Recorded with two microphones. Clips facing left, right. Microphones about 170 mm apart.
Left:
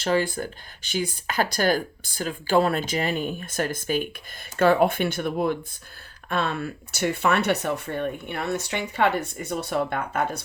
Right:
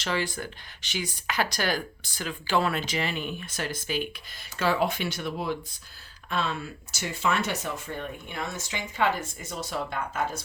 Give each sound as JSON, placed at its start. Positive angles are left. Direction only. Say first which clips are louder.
{"t": 0.0, "sound": "speech", "louder": "left 6 dB", "side_deg": 40}